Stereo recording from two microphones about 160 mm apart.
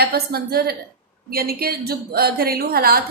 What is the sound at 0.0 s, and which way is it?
A woman's voice, 75° right (ahead or behind).